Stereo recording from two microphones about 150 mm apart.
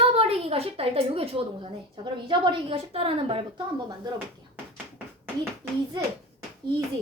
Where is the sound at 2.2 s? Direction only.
35° right (ahead or behind).